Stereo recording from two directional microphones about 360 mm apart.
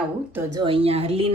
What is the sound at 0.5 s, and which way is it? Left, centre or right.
Speech, centre.